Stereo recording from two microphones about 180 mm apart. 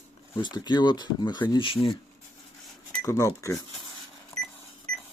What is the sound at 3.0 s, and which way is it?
Speech, 15° left (ahead or behind).